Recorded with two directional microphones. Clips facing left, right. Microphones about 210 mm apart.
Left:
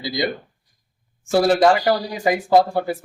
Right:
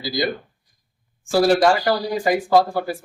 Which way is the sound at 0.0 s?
20° left (ahead or behind).